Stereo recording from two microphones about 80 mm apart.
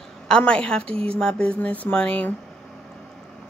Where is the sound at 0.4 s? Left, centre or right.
Centre.